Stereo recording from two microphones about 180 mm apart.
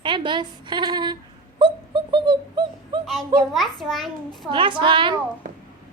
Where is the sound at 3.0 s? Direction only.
Centre (ahead or behind).